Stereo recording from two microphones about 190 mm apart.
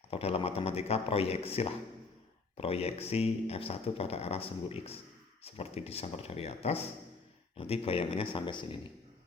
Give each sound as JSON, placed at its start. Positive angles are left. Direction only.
{"t": 0.1, "sound": "speech", "side_deg": 30}